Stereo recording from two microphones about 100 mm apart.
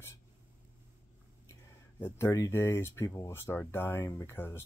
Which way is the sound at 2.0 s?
20° left (ahead or behind).